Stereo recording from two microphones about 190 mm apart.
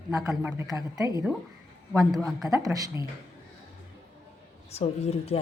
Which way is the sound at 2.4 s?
20° right (ahead or behind).